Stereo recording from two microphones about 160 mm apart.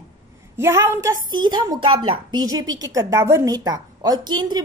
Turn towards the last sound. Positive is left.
turn(degrees=-25)  # may be behind; listen again after turning